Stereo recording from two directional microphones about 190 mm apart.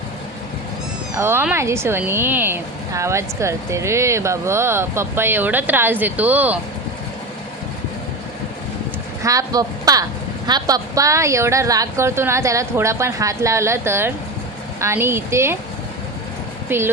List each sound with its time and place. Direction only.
1.1 s speech: 15° right (ahead or behind)
9.2 s speech: 20° right (ahead or behind)
16.6 s speech: 10° right (ahead or behind)